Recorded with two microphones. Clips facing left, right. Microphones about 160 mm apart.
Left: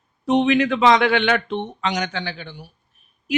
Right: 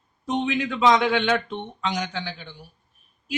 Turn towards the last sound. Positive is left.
turn(degrees=70)  # may be behind; listen again after turning